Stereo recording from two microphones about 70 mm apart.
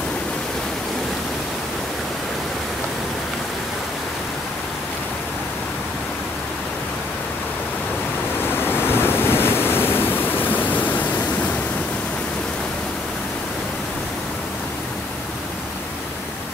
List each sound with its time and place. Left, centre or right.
8.6 s waves: left